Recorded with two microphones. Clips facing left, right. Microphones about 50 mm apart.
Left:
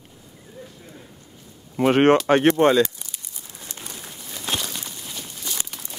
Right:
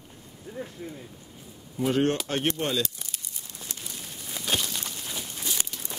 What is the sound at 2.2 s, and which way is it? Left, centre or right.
Speech, left.